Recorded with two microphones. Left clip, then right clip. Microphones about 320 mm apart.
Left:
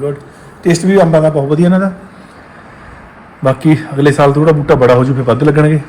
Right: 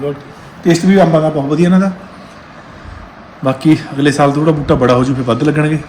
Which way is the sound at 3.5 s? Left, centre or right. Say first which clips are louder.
Left 1 dB; centre.